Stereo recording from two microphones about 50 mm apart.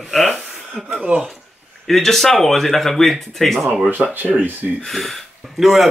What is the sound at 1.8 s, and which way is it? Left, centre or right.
Speech, centre.